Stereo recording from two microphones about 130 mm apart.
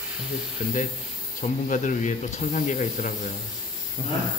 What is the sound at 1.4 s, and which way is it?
Speech, 75° left (ahead or behind).